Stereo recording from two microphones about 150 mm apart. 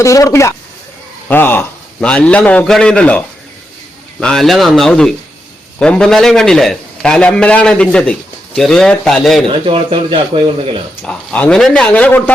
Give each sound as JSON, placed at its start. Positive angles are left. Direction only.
{"t": 0.0, "sound": "a man's voice", "side_deg": 20}
{"t": 9.5, "sound": "speech", "side_deg": -35}
{"t": 11.0, "sound": "a man's voice", "side_deg": 5}